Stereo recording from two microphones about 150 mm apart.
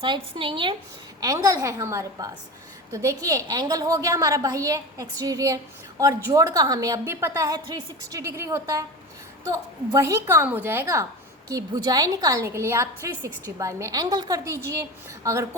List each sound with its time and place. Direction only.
0.0 s a woman's voice: 35° right (ahead or behind)
1.2 s a woman's voice: 25° right (ahead or behind)